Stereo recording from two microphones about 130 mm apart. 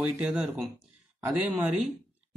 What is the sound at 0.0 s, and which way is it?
Speech, 5° right (ahead or behind).